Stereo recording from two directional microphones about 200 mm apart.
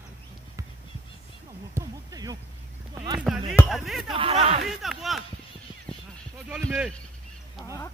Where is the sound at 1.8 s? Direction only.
20° right (ahead or behind).